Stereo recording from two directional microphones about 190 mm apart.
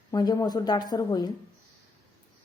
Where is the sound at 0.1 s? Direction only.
20° left (ahead or behind).